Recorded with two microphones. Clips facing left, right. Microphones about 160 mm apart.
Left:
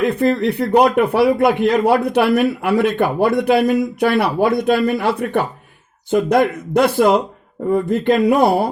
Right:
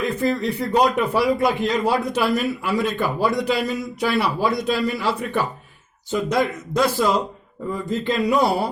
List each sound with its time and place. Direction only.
0.0 s speech: 60° left (ahead or behind)